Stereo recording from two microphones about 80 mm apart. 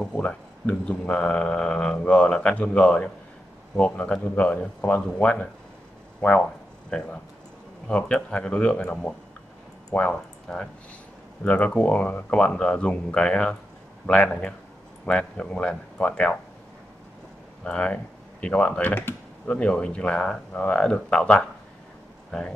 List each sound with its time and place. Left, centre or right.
0.0 s speech: centre
17.6 s speech: centre
18.9 s speech: left
19.4 s speech: centre